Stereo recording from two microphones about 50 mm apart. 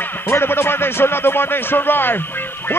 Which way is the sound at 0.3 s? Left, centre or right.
Left.